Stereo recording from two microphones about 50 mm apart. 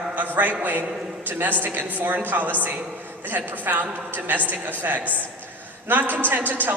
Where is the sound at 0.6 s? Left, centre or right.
Right.